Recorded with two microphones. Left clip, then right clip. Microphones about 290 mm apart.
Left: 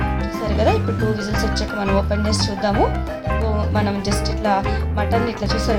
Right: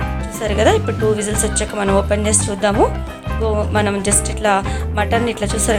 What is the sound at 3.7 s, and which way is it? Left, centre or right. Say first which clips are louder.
Speech: right 4 dB; right.